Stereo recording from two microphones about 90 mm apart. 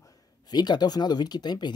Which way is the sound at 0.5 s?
50° left (ahead or behind).